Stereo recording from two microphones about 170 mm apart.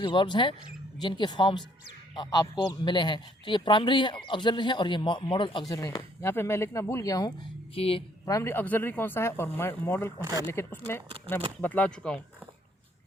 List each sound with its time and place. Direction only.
0.0 s a man's voice: 30° left (ahead or behind)
8.2 s speech: 20° left (ahead or behind)